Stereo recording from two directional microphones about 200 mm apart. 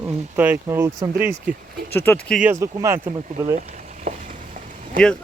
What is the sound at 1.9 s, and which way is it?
Speech, 10° left (ahead or behind).